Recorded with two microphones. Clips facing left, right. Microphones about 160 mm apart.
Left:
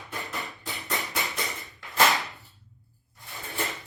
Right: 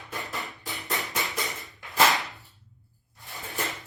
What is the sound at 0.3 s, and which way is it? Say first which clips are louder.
Hammer: even; 20° left (ahead or behind).